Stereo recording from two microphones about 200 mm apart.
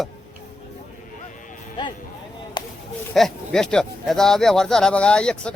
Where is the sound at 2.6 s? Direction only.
20° left (ahead or behind).